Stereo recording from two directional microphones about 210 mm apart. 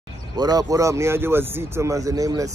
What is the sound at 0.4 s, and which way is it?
Speech, 20° right (ahead or behind).